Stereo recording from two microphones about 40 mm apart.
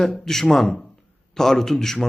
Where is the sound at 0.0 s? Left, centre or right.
Centre.